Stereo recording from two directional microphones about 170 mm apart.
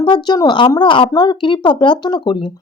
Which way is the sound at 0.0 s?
25° left (ahead or behind).